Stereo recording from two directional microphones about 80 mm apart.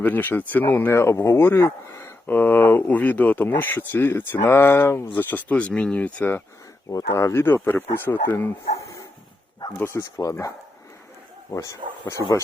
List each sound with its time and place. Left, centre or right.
0.0 s speech: left
6.9 s speech: left
9.7 s speech: left
10.2 s speech: left
11.5 s speech: left